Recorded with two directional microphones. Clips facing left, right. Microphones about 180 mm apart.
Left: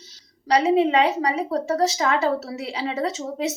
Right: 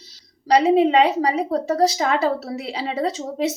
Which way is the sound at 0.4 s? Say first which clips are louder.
Right 3 dB; 35° right (ahead or behind).